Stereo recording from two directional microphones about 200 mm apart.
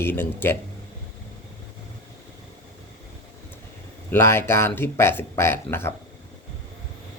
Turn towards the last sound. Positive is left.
turn(degrees=10)  # may be behind; listen again after turning